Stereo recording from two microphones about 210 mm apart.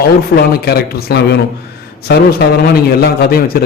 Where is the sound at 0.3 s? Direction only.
45° left (ahead or behind).